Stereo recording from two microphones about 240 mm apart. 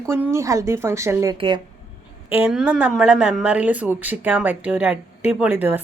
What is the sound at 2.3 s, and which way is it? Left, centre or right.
A woman's voice, centre.